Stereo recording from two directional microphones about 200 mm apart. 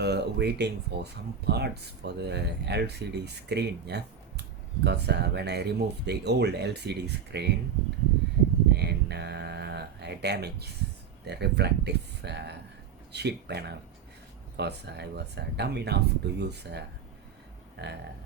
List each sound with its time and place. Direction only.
0.0 s speech: 55° right (ahead or behind)
8.7 s a sound: 55° right (ahead or behind)
11.3 s speech: 55° right (ahead or behind)